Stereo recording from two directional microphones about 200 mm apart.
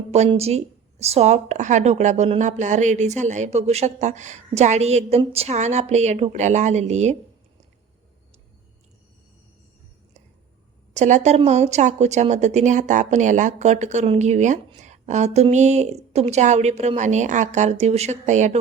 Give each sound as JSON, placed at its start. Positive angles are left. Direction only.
{"t": 0.1, "sound": "a woman's voice", "side_deg": -30}
{"t": 10.9, "sound": "a woman's voice", "side_deg": -35}